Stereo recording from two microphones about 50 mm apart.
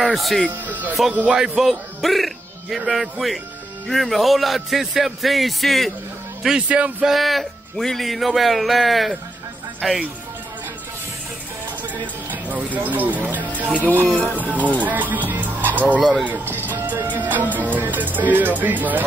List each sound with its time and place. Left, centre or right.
0.0 s speech: centre
0.7 s music: right
1.3 s a man's voice: centre
6.7 s speech: right
7.1 s speech: centre
11.9 s speech: right
13.7 s music: right
14.8 s speech: right
16.0 s speech: centre
16.3 s music: right